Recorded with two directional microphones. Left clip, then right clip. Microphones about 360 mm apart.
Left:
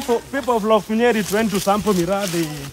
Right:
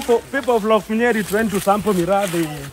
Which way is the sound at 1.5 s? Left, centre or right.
Centre.